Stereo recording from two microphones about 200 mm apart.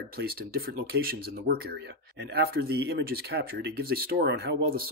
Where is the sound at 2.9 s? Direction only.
55° right (ahead or behind).